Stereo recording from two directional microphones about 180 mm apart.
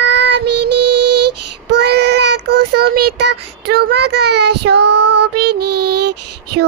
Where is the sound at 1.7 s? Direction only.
65° right (ahead or behind).